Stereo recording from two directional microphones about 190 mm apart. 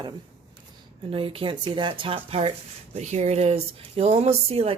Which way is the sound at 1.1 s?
30° right (ahead or behind).